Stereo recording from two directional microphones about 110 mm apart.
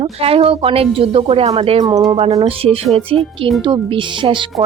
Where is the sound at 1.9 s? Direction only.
35° right (ahead or behind).